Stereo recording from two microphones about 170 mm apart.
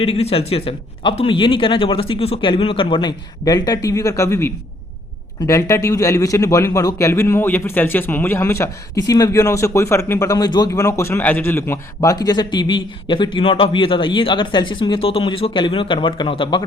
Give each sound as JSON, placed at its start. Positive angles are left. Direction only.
{"t": 0.0, "sound": "a man's voice", "side_deg": 35}